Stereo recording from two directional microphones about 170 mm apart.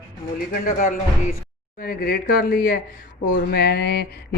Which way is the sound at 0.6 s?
55° left (ahead or behind).